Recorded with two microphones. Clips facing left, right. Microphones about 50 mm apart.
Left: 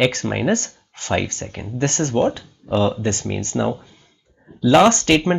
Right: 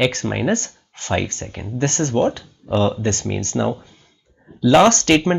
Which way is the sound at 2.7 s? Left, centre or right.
Centre.